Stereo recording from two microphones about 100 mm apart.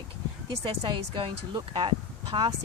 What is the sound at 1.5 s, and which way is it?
Speech, 50° right (ahead or behind).